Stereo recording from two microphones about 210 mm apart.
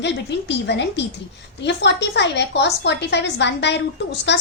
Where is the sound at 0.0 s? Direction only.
55° left (ahead or behind).